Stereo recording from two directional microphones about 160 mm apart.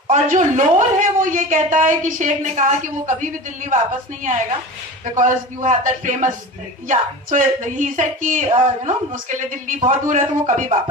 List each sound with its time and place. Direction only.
0.1 s a woman's voice: 50° right (ahead or behind)
5.1 s a woman's voice: 50° right (ahead or behind)